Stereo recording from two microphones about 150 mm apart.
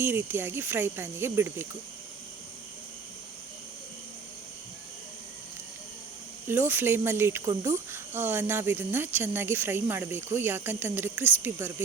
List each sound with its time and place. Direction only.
0.0 s speech: 15° right (ahead or behind)
6.5 s speech: 15° right (ahead or behind)